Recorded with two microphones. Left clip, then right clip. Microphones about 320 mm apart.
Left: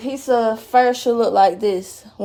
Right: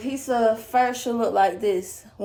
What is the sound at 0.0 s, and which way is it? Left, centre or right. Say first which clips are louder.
Speech: left 4 dB; left.